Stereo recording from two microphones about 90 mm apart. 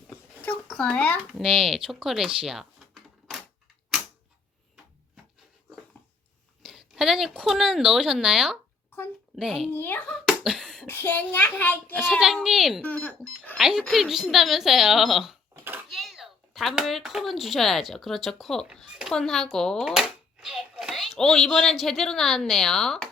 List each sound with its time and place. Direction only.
0.7 s speech: 10° left (ahead or behind)
1.5 s speech: 5° right (ahead or behind)
6.7 s a sound: 5° right (ahead or behind)
7.4 s a woman's voice: 5° right (ahead or behind)
9.6 s a child's voice: 25° left (ahead or behind)
10.1 s a sound: centre (ahead or behind)
10.8 s a child's voice: 25° left (ahead or behind)
12.2 s a woman's voice: 5° right (ahead or behind)
12.8 s speech: 15° left (ahead or behind)
13.6 s a woman's voice: 5° right (ahead or behind)
19.8 s a child's voice: 5° right (ahead or behind)